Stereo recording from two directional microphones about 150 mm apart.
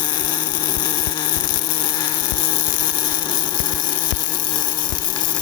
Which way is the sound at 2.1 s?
15° left (ahead or behind).